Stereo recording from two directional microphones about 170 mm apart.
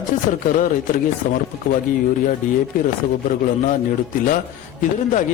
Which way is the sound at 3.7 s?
50° left (ahead or behind).